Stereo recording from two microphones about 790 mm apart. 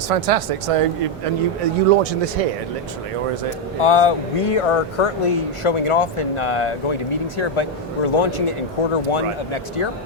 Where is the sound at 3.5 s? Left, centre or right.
Left.